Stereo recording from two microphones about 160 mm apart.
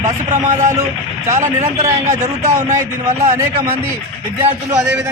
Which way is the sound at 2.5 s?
50° right (ahead or behind).